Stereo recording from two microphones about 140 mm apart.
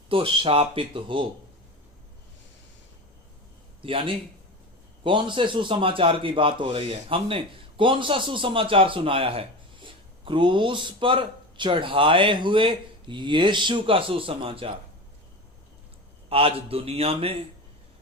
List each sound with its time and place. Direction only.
0.1 s speech: 40° right (ahead or behind)
3.8 s a man's voice: 40° right (ahead or behind)
16.3 s a man's voice: 40° right (ahead or behind)